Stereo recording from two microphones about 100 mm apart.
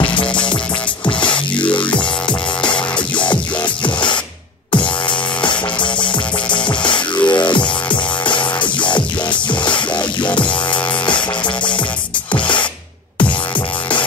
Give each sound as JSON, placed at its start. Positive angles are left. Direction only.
{"t": 0.0, "sound": "music", "side_deg": 55}
{"t": 5.4, "sound": "music", "side_deg": 50}